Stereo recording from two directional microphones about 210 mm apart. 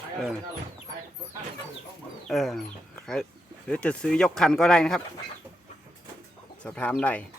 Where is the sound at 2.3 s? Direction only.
Centre (ahead or behind).